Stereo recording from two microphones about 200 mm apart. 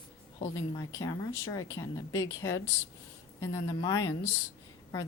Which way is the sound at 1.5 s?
15° left (ahead or behind).